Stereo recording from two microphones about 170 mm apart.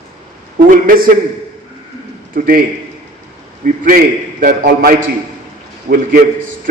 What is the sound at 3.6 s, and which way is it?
A man's voice, 50° right (ahead or behind).